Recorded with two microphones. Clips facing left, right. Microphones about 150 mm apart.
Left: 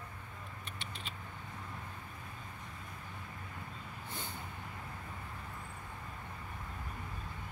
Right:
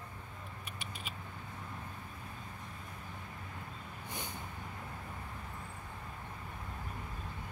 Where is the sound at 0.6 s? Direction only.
10° right (ahead or behind).